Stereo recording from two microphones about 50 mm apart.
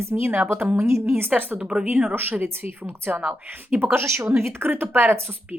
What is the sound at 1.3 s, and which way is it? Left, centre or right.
Speech, right.